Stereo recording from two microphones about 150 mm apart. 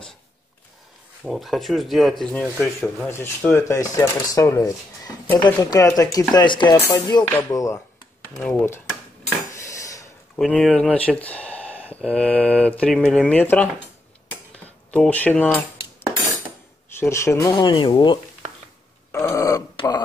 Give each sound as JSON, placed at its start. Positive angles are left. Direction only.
{"t": 1.2, "sound": "speech", "side_deg": 0}
{"t": 9.6, "sound": "cutlery", "side_deg": 20}
{"t": 10.3, "sound": "speech", "side_deg": 5}
{"t": 14.9, "sound": "speech", "side_deg": 10}
{"t": 16.9, "sound": "speech", "side_deg": 15}
{"t": 19.1, "sound": "a sound", "side_deg": 20}